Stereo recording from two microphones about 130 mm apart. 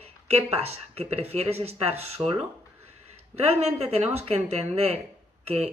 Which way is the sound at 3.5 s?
55° right (ahead or behind).